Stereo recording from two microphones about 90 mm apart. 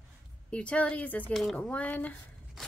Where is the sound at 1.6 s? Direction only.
15° left (ahead or behind).